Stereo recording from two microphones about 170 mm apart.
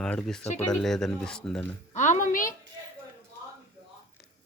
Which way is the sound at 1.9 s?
45° left (ahead or behind).